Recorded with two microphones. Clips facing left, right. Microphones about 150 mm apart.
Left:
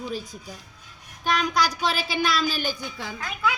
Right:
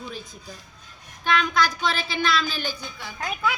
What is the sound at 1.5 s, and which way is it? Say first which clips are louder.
Speech: right 1 dB; 40° left (ahead or behind).